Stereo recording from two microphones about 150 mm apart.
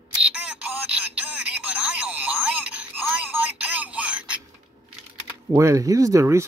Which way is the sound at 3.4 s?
10° right (ahead or behind).